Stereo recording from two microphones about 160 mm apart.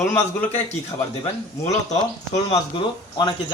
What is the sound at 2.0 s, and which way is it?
Speech, 25° left (ahead or behind).